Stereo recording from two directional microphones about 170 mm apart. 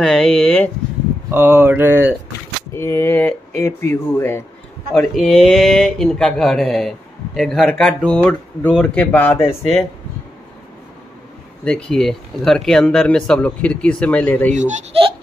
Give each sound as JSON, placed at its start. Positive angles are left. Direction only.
{"t": 0.0, "sound": "speech", "side_deg": 5}
{"t": 1.3, "sound": "speech", "side_deg": -10}
{"t": 2.7, "sound": "speech", "side_deg": 15}
{"t": 4.9, "sound": "speech", "side_deg": 0}
{"t": 9.5, "sound": "speech", "side_deg": 35}
{"t": 11.6, "sound": "speech", "side_deg": 5}
{"t": 14.5, "sound": "speech", "side_deg": -45}